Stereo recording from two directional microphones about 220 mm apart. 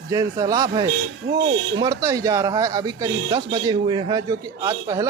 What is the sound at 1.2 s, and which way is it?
Speech, 45° right (ahead or behind).